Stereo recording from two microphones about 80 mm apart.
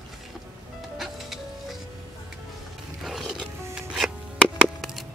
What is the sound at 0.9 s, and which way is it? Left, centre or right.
Music, centre.